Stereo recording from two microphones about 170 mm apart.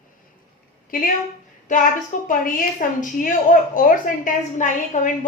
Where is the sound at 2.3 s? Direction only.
50° left (ahead or behind).